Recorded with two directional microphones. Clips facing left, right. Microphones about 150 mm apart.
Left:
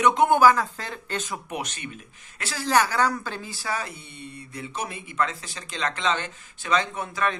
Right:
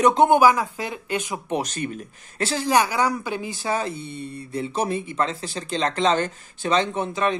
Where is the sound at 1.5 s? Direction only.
35° right (ahead or behind).